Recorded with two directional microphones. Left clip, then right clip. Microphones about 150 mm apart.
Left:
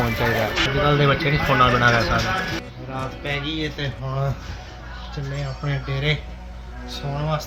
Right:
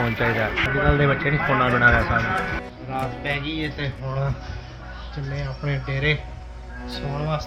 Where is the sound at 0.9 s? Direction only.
20° left (ahead or behind).